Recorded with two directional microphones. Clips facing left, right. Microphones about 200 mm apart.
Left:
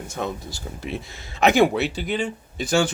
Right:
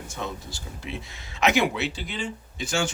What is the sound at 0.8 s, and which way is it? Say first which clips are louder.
Speech: left 5 dB; 40° left (ahead or behind).